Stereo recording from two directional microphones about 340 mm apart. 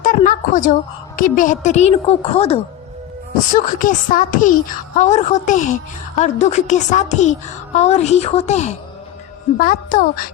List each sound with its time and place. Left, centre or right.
0.0 s a woman's voice: left